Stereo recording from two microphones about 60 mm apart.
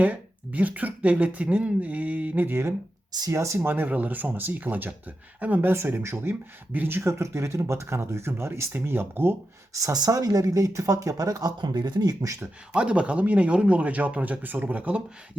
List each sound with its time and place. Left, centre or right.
0.0 s speech: right
3.1 s speech: right
3.6 s speech: right
5.7 s speech: right
9.7 s speech: right
12.0 s speech: right
12.7 s speech: centre